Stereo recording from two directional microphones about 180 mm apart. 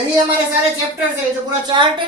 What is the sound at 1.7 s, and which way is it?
Speech, 25° right (ahead or behind).